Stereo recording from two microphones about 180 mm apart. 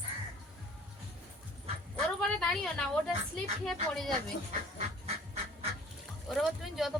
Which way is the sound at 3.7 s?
Centre (ahead or behind).